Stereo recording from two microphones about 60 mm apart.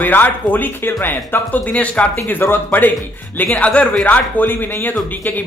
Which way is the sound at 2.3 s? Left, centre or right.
Left.